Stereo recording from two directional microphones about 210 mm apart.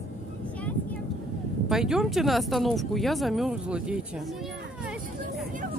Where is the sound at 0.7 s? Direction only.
5° left (ahead or behind).